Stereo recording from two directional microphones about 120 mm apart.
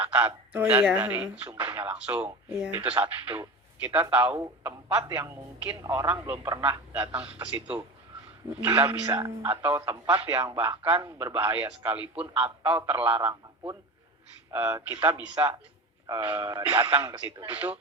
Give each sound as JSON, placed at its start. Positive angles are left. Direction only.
{"t": 0.0, "sound": "a man's voice", "side_deg": -15}